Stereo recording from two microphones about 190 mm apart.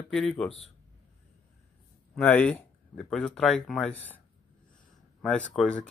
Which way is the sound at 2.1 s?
10° left (ahead or behind).